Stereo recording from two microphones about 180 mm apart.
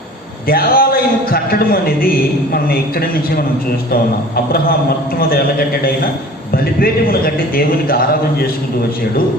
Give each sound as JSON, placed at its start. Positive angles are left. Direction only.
{"t": 0.4, "sound": "a man's voice", "side_deg": 55}
{"t": 5.3, "sound": "a man's voice", "side_deg": 55}